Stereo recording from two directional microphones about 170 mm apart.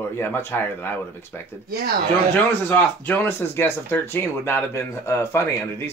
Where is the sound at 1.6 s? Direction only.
70° right (ahead or behind).